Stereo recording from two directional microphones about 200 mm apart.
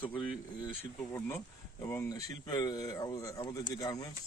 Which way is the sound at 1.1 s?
10° left (ahead or behind).